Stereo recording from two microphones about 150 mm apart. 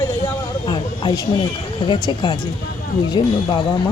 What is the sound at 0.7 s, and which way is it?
Speech, 35° left (ahead or behind).